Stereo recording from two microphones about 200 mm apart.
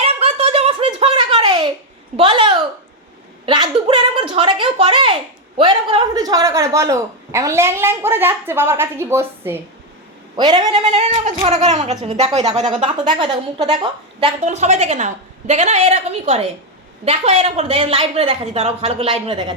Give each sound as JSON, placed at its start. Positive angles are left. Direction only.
{"t": 0.0, "sound": "a sound", "side_deg": -30}
{"t": 2.1, "sound": "speech", "side_deg": -25}
{"t": 11.4, "sound": "a woman's voice", "side_deg": -35}
{"t": 14.4, "sound": "a woman's voice", "side_deg": -35}